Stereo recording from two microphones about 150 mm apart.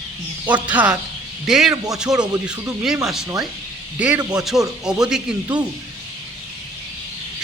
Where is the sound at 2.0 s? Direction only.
5° right (ahead or behind).